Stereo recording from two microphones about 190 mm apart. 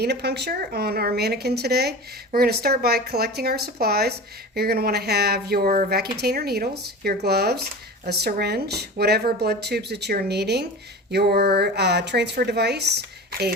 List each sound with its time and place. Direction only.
0.0 s speech: 60° right (ahead or behind)